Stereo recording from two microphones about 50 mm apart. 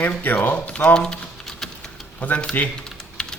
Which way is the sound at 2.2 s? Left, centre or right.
Left.